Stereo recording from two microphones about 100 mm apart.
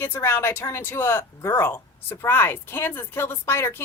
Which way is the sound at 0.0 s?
25° left (ahead or behind).